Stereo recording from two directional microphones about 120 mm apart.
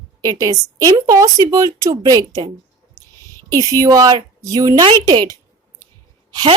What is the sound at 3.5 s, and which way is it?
A woman's voice, 30° right (ahead or behind).